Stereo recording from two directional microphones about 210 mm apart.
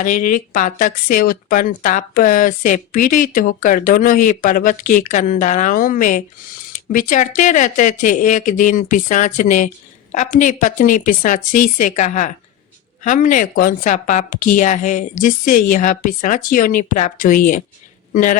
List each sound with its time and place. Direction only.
0.0 s speech: 40° left (ahead or behind)